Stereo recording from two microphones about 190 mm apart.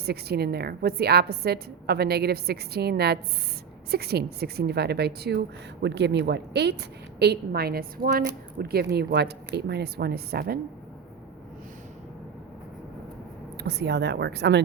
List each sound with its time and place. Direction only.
0.0 s a woman's voice: 60° right (ahead or behind)
13.6 s a woman's voice: 60° right (ahead or behind)